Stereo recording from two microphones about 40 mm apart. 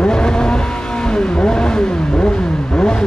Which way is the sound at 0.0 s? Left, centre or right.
Centre.